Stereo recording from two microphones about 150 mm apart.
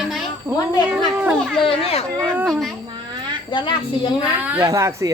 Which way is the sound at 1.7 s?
40° left (ahead or behind).